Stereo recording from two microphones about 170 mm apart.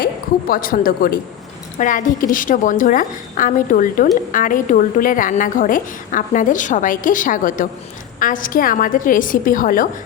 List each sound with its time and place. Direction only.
0.0 s a woman's voice: 60° left (ahead or behind)